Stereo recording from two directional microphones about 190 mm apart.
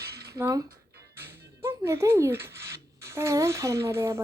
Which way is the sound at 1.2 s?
10° right (ahead or behind).